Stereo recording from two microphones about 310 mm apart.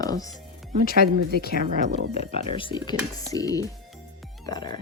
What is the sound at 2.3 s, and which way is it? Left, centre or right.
Speech, centre.